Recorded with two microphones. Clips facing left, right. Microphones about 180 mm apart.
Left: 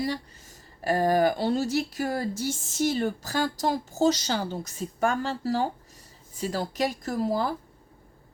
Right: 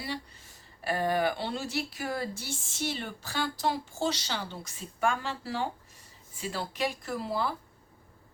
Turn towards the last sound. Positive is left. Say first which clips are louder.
# left 5 dB
turn(degrees=40)  # may be behind; listen again after turning